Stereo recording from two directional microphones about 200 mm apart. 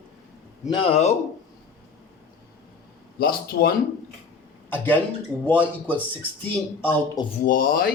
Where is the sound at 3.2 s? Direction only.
50° left (ahead or behind).